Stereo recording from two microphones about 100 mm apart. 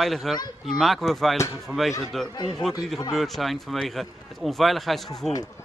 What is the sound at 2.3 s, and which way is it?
Speech, 45° left (ahead or behind).